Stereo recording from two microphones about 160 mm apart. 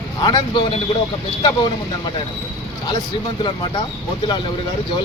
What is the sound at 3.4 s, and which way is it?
Speech, 30° left (ahead or behind).